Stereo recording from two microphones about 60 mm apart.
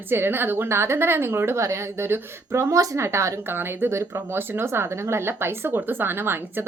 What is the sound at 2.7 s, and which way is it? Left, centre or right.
Speech, right.